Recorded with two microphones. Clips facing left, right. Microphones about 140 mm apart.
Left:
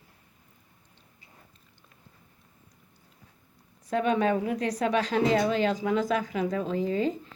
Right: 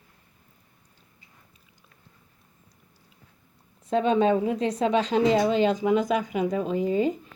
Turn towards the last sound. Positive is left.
turn(degrees=-15)  # may be behind; listen again after turning